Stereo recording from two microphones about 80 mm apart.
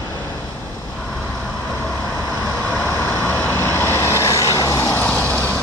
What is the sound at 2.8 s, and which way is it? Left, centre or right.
Vehicle, left.